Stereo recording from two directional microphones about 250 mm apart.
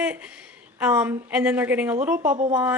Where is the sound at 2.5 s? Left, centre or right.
Centre.